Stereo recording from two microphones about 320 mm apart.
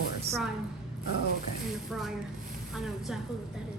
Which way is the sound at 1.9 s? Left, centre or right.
Centre.